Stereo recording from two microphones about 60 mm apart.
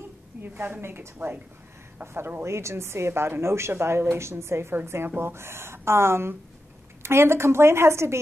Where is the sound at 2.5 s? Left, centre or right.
Right.